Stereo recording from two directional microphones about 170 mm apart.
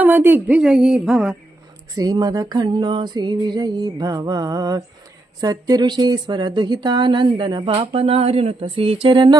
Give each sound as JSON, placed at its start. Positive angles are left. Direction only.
{"t": 0.0, "sound": "speech", "side_deg": -10}
{"t": 2.0, "sound": "speech", "side_deg": -20}